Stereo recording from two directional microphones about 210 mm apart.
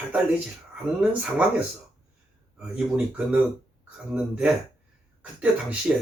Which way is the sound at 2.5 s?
5° right (ahead or behind).